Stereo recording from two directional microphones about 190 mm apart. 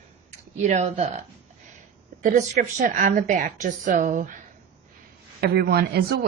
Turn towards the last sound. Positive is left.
turn(degrees=-55)  # may be behind; listen again after turning